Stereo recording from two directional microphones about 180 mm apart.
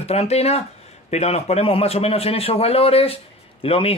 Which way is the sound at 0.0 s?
35° left (ahead or behind).